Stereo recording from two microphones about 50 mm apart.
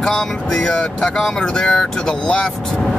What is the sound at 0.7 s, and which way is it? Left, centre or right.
Speech, centre.